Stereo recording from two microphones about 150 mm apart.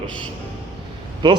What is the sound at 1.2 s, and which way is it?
Speech, 30° right (ahead or behind).